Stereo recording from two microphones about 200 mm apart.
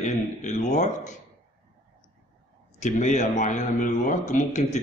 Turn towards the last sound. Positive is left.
turn(degrees=40)  # may be behind; listen again after turning